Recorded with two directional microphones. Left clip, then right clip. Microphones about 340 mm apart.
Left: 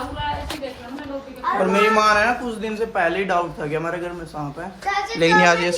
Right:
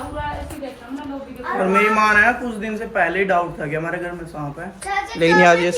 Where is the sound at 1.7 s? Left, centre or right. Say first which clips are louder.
Right 2 dB; centre.